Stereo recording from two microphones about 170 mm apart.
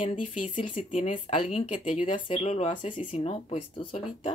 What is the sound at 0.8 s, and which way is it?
Speech, 45° left (ahead or behind).